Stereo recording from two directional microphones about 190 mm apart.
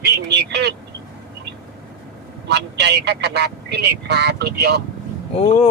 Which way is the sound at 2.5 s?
60° right (ahead or behind).